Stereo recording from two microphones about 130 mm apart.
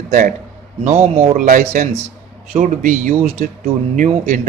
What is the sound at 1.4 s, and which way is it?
A man's voice, 80° right.